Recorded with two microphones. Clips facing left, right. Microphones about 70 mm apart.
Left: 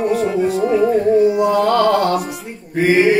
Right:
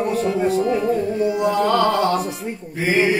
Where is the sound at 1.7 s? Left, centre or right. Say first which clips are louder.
Left 3 dB; left.